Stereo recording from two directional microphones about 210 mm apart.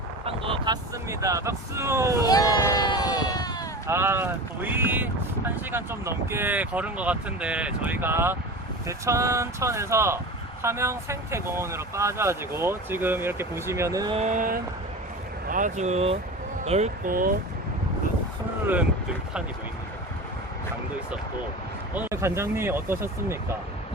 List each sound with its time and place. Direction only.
0.3 s speech: 25° right (ahead or behind)
2.2 s a sound: 15° left (ahead or behind)
3.8 s speech: 10° right (ahead or behind)
14.2 s speech: 35° right (ahead or behind)
18.6 s speech: 10° right (ahead or behind)
21.9 s speech: 10° right (ahead or behind)